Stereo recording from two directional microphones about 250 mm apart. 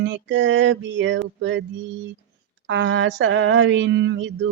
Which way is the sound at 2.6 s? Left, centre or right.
Right.